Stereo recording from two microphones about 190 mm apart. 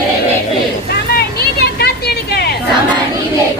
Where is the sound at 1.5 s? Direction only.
55° left (ahead or behind).